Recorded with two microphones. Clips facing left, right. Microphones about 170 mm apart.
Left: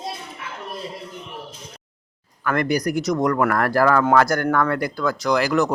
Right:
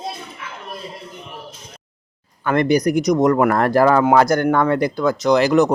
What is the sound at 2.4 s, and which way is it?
Speech, 25° right (ahead or behind).